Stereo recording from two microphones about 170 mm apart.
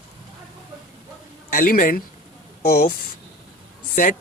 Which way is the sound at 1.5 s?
55° left (ahead or behind).